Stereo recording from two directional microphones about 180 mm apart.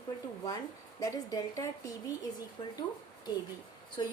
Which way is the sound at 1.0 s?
20° left (ahead or behind).